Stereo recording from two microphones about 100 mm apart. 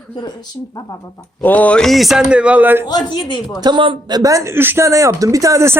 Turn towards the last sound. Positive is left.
turn(degrees=-30)  # may be behind; listen again after turning